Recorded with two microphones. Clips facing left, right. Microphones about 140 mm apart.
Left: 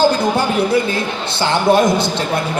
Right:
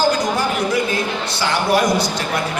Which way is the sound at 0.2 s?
30° left (ahead or behind).